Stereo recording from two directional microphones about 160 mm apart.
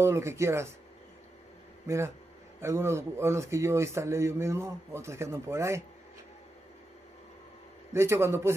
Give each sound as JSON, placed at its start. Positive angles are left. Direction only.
{"t": 0.0, "sound": "a man's voice", "side_deg": -15}
{"t": 1.9, "sound": "a man's voice", "side_deg": -15}
{"t": 7.9, "sound": "a man's voice", "side_deg": -15}